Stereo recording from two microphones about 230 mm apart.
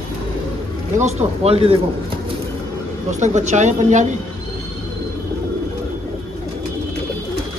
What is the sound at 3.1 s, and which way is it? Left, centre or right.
Speech, right.